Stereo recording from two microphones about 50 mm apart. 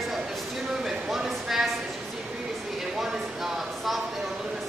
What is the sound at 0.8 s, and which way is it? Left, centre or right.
Speech, centre.